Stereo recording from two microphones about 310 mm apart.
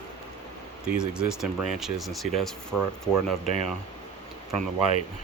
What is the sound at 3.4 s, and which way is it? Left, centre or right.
Speech, left.